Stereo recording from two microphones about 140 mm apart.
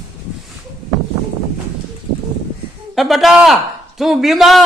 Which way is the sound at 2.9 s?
Centre (ahead or behind).